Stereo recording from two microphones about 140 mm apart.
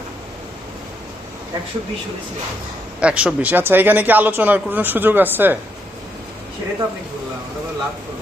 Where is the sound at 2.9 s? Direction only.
10° right (ahead or behind).